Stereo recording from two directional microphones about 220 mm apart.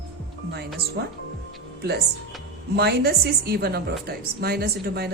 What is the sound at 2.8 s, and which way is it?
Speech, 45° right (ahead or behind).